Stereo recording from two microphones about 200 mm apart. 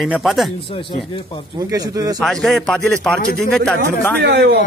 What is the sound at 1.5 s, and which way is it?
Speech, 20° right (ahead or behind).